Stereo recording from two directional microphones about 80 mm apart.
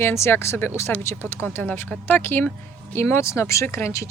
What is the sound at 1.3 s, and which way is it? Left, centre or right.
Speech, left.